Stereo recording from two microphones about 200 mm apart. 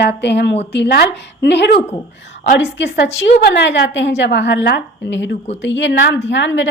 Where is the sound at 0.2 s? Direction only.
60° left (ahead or behind).